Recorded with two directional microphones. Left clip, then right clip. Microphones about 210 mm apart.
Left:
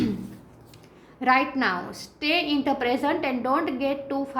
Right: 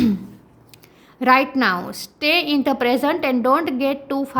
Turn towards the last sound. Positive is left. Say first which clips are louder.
# right 5 dB
turn(degrees=-55)  # may be behind; listen again after turning